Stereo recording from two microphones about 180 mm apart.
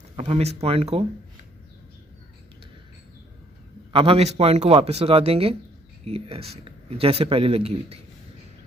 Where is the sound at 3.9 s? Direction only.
30° right (ahead or behind).